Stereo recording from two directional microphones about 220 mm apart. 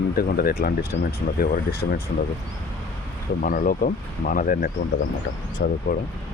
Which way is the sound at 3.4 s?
40° left (ahead or behind).